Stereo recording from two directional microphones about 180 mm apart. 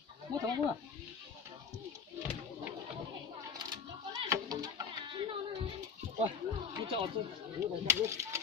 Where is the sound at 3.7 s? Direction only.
20° right (ahead or behind).